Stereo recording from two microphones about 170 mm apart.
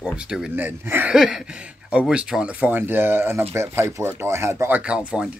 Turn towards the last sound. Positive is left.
turn(degrees=-5)  # may be behind; listen again after turning